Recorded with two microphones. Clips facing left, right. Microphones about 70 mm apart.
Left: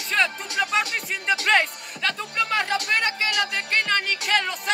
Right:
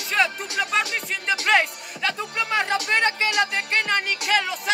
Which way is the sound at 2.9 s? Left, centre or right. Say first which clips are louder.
Right 3 dB; right.